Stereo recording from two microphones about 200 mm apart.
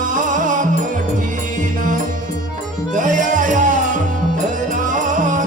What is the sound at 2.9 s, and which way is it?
Music, 40° right (ahead or behind).